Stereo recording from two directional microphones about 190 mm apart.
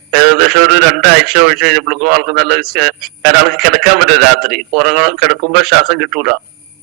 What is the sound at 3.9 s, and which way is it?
Speech, 55° right (ahead or behind).